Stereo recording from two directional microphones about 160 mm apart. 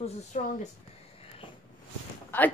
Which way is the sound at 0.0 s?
50° left (ahead or behind).